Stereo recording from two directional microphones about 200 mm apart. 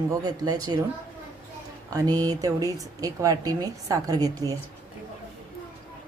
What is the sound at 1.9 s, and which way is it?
A woman's voice, 20° right (ahead or behind).